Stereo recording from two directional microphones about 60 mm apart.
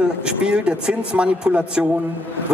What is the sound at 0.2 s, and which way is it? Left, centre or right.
A man's voice, centre.